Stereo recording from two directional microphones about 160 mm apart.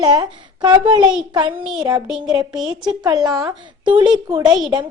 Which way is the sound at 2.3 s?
25° right (ahead or behind).